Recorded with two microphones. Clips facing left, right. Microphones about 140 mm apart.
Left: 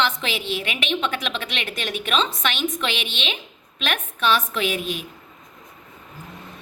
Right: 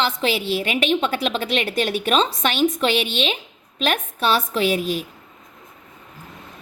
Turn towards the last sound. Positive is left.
turn(degrees=-35)  # may be behind; listen again after turning